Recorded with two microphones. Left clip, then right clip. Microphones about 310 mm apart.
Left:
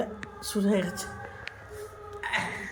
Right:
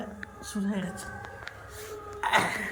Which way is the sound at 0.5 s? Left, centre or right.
Centre.